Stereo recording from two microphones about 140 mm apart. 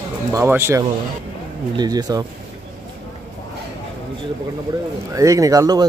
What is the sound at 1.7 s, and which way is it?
Speech, 30° right (ahead or behind).